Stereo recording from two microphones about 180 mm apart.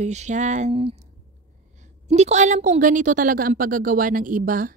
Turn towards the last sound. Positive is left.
turn(degrees=-50)  # may be behind; listen again after turning